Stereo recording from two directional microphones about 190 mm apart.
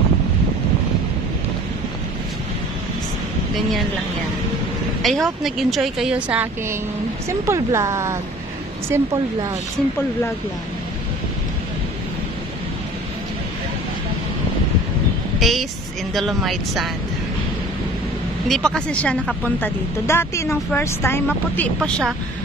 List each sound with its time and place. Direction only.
5.0 s a woman's voice: centre (ahead or behind); by 9.5 s 15° right (ahead or behind)
15.3 s vehicle: centre (ahead or behind)
16.1 s a woman's voice: centre (ahead or behind)
18.5 s a woman's voice: 5° left (ahead or behind)